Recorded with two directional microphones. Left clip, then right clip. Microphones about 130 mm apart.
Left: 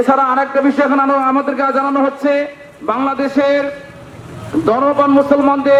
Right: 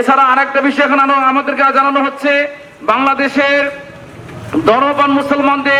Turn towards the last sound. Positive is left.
turn(degrees=-30)  # may be behind; listen again after turning